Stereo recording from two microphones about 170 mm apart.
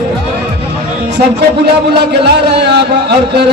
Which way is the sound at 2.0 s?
75° right (ahead or behind).